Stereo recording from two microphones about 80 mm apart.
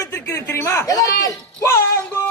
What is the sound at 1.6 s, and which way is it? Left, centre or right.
Music, left.